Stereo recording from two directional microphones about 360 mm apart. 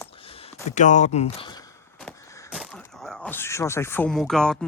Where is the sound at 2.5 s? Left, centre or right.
Centre.